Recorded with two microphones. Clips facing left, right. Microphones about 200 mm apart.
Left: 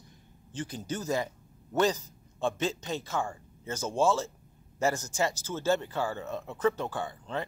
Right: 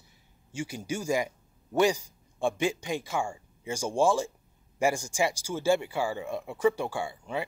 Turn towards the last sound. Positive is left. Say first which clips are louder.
# right 2 dB
turn(degrees=-10)  # may be behind; listen again after turning